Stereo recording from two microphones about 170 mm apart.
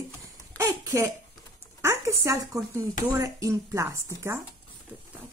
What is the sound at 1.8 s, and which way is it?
Speech, 15° right (ahead or behind).